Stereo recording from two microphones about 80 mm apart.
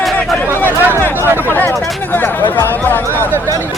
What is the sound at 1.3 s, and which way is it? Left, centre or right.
Speech, right.